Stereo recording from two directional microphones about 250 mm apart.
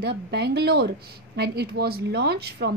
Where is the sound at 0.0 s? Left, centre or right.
Right.